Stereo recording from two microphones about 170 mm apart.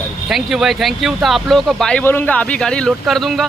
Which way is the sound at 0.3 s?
Centre (ahead or behind).